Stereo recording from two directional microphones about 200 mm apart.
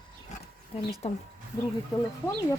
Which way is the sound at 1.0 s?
30° left (ahead or behind).